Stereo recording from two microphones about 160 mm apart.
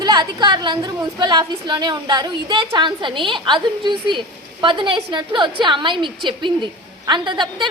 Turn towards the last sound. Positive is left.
turn(degrees=-30)  # may be behind; listen again after turning